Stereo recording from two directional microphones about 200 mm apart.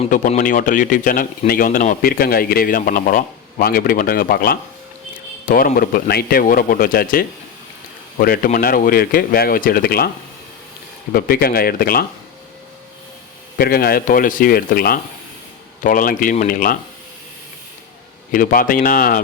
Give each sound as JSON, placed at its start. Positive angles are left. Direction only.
{"t": 0.0, "sound": "speech", "side_deg": 40}
{"t": 11.1, "sound": "speech", "side_deg": 50}
{"t": 13.6, "sound": "speech", "side_deg": 50}
{"t": 18.3, "sound": "speech", "side_deg": 45}